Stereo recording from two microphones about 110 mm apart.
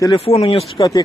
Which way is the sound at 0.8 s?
40° left (ahead or behind).